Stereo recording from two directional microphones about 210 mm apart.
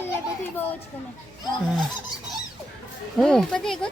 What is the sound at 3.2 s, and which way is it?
Speech, centre (ahead or behind).